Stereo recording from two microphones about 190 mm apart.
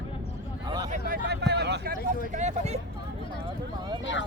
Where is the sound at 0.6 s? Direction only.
20° right (ahead or behind).